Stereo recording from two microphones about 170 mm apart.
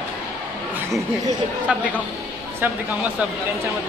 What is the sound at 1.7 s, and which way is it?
A man's voice, 5° right (ahead or behind).